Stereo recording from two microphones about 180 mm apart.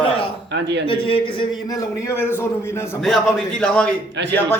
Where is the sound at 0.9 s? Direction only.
30° left (ahead or behind).